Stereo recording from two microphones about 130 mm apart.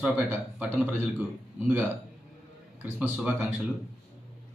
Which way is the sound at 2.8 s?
10° right (ahead or behind).